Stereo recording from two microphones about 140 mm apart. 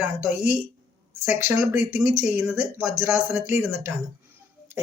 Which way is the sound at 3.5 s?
10° right (ahead or behind).